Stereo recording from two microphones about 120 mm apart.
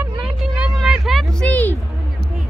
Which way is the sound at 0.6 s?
5° right (ahead or behind).